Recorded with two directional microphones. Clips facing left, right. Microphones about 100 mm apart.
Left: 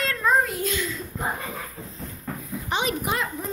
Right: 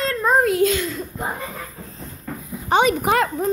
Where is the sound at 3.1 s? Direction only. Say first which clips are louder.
Right 9 dB; 65° right (ahead or behind).